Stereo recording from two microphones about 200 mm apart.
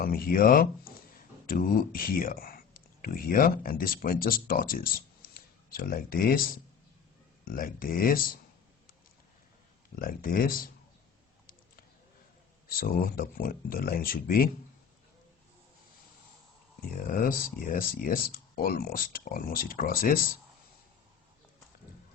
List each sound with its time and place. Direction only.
0.0 s speech: 45° left (ahead or behind)
9.9 s speech: 45° left (ahead or behind)
12.7 s speech: 45° left (ahead or behind)
17.1 s speech: 45° left (ahead or behind)